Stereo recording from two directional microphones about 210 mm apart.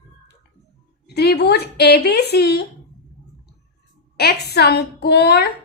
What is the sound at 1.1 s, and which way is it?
Speech, 50° left (ahead or behind).